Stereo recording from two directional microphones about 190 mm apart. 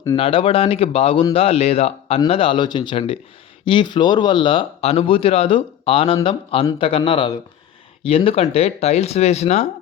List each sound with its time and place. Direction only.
0.2 s speech: 30° left (ahead or behind)